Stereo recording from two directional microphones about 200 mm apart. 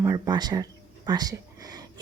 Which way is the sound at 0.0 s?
15° right (ahead or behind).